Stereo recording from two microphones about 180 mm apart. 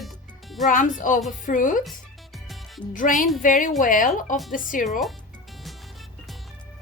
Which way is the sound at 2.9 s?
50° left (ahead or behind).